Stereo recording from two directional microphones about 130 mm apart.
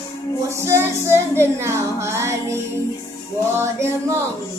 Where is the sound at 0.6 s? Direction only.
20° right (ahead or behind).